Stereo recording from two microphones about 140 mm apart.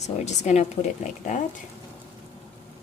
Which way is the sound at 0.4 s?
55° left (ahead or behind).